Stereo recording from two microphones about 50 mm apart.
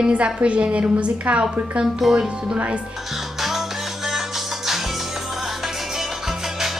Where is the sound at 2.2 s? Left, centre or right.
Right.